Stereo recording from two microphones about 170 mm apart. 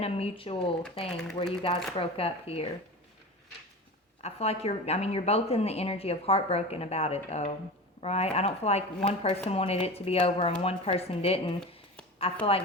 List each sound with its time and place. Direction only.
0.0 s speech: 35° left (ahead or behind)
1.0 s speech: centre (ahead or behind)
2.0 s a woman's voice: 35° left (ahead or behind)
4.2 s a woman's voice: 35° left (ahead or behind)